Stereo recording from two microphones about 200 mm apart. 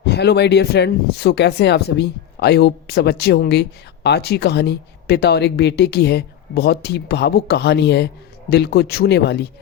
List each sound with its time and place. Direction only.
0.0 s speech: 55° left (ahead or behind)